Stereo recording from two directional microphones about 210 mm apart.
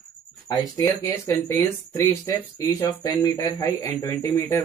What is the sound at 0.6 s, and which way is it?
A man's voice, 15° left (ahead or behind).